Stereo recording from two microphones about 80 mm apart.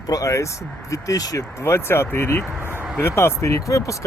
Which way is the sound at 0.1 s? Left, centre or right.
Left.